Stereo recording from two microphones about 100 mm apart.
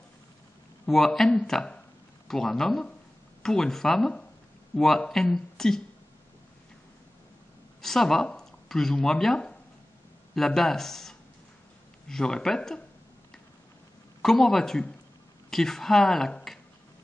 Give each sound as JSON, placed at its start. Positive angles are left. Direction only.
{"t": 0.8, "sound": "speech", "side_deg": 5}
{"t": 7.8, "sound": "speech", "side_deg": 5}
{"t": 14.2, "sound": "speech", "side_deg": 5}